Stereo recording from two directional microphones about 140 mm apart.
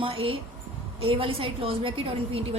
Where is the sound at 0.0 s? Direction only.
40° right (ahead or behind).